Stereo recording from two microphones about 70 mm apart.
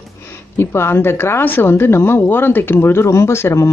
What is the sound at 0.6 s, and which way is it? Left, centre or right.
A woman's voice, left.